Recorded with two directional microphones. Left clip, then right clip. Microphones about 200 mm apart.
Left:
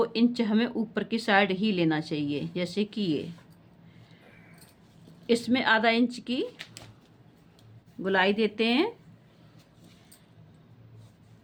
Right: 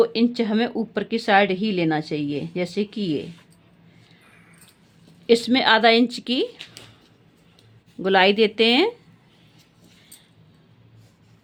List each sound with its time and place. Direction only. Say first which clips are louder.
0.0 s speech: right 6 dB; 30° right (ahead or behind)
5.2 s a woman's voice: right 8 dB; 35° right (ahead or behind)
8.0 s a woman's voice: right 8 dB; 35° right (ahead or behind)